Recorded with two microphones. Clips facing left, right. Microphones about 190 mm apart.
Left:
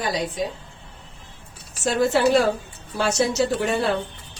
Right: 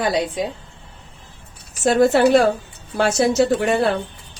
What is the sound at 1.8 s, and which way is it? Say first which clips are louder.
Speech: right 5 dB; 55° right (ahead or behind).